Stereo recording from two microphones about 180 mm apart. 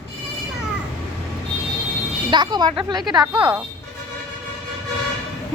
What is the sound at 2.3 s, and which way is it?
Speech, 25° right (ahead or behind).